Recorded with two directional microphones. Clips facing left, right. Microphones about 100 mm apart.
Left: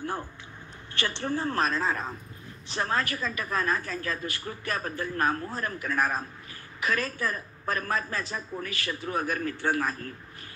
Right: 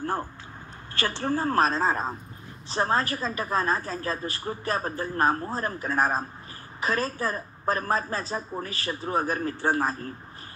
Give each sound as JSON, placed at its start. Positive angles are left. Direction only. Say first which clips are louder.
{"t": 0.0, "sound": "a woman's voice", "louder": "right 4 dB", "side_deg": -40}